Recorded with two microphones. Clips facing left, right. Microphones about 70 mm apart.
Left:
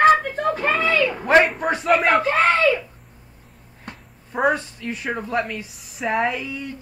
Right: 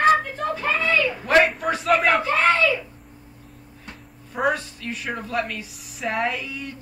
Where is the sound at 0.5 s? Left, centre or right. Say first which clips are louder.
Even; left.